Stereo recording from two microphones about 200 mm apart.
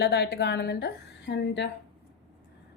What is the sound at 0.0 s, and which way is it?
A woman's voice, 55° left (ahead or behind).